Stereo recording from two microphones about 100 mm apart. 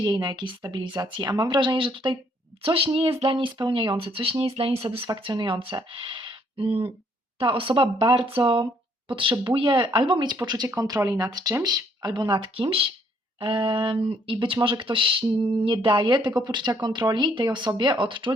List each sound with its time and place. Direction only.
0.0 s speech: 45° right (ahead or behind)
2.6 s speech: 65° right (ahead or behind)
3.3 s speech: 55° right (ahead or behind)
5.0 s speech: 50° right (ahead or behind)
10.8 s speech: 35° right (ahead or behind); by 18.3 s 55° right (ahead or behind)